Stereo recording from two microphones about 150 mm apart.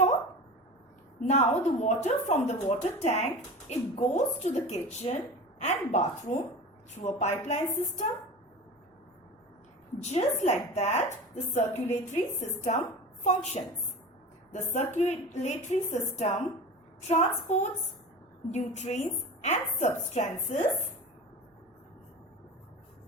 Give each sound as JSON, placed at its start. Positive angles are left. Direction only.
{"t": 1.3, "sound": "a woman's voice", "side_deg": 50}
{"t": 10.0, "sound": "a woman's voice", "side_deg": 45}